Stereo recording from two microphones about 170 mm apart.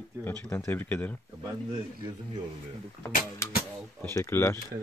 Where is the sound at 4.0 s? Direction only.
15° left (ahead or behind).